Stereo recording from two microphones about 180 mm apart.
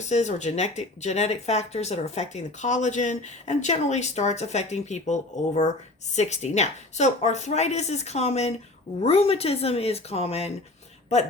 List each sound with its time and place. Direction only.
0.1 s speech: 40° left (ahead or behind)